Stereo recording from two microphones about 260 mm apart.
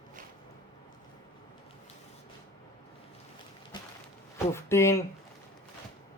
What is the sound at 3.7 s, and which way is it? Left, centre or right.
Walk, centre.